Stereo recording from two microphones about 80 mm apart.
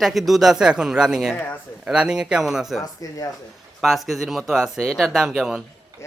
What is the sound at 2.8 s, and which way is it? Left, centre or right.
Speech, left.